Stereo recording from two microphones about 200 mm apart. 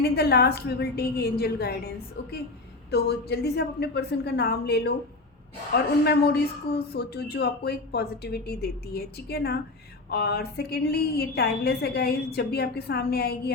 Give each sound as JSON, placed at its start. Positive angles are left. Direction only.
{"t": 0.0, "sound": "a woman's voice", "side_deg": 55}